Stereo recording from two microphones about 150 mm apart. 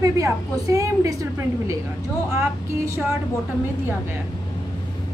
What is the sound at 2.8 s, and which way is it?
Speech, 20° right (ahead or behind).